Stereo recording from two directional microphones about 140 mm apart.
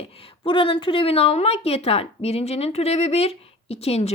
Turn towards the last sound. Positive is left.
turn(degrees=45)  # may be behind; listen again after turning